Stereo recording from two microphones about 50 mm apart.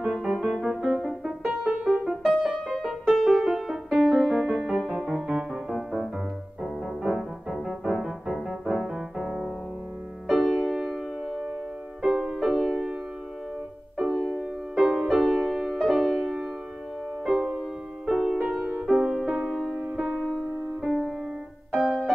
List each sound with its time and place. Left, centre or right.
0.0 s music: centre
0.8 s music: centre
10.2 s music: centre
12.0 s music: centre
14.1 s music: centre
14.8 s music: centre
17.4 s music: centre
18.0 s music: centre
19.5 s music: centre
20.8 s music: centre